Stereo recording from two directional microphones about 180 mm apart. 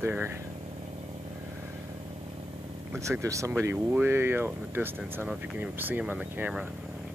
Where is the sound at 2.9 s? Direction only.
15° right (ahead or behind).